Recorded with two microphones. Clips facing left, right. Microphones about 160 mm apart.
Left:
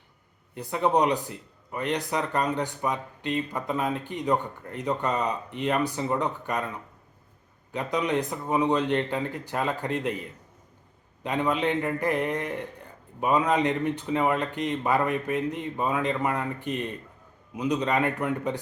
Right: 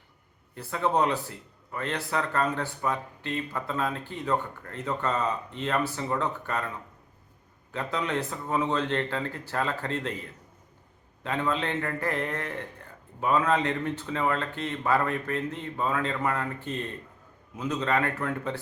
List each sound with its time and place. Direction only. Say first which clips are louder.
0.5 s speech: left 3 dB; 15° left (ahead or behind)
7.7 s speech: left 3 dB; 15° left (ahead or behind)
11.2 s speech: left 3 dB; 15° left (ahead or behind)